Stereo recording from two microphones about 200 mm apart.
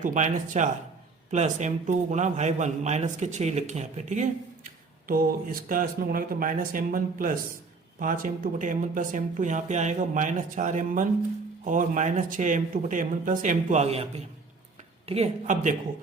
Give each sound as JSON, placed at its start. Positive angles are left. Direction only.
{"t": 0.0, "sound": "a man's voice", "side_deg": -40}